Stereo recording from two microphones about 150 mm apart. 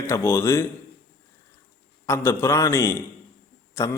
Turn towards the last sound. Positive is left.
turn(degrees=20)  # may be behind; listen again after turning